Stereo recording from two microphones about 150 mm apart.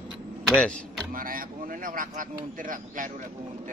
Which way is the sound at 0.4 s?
5° left (ahead or behind).